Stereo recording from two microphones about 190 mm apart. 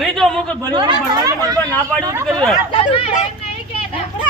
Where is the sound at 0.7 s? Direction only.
20° right (ahead or behind).